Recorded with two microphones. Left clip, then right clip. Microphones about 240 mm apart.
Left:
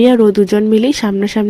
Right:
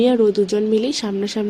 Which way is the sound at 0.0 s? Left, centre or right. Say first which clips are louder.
Left 6 dB; left.